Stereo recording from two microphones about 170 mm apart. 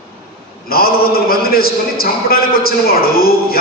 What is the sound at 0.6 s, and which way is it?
A man's voice, 60° left (ahead or behind).